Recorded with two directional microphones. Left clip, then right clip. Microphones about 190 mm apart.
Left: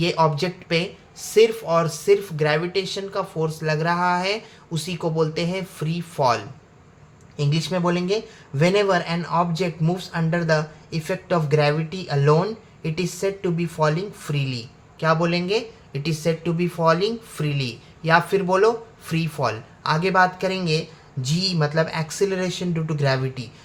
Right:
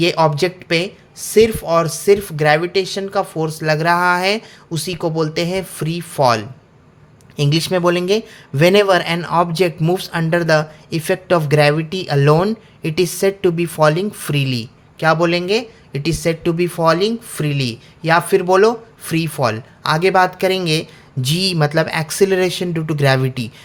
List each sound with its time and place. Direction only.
0.0 s speech: 40° right (ahead or behind)